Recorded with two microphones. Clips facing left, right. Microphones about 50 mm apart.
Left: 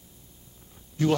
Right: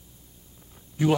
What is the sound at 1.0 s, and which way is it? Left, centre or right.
Speech, centre.